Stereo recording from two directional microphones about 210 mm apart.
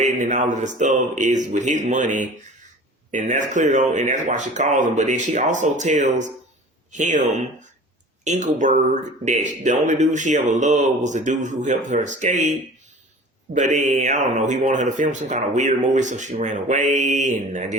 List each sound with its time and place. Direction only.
0.0 s speech: 35° right (ahead or behind)